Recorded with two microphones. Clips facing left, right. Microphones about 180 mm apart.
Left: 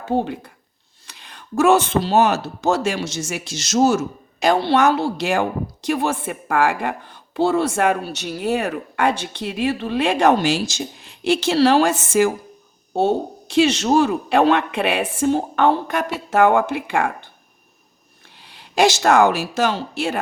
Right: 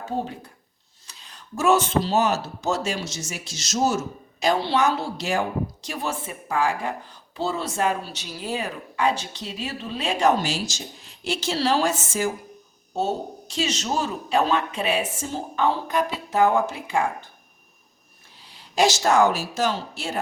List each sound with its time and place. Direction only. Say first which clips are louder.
0.1 s a woman's voice: left 9 dB; 70° left (ahead or behind)
18.4 s speech: left 4 dB; 65° left (ahead or behind)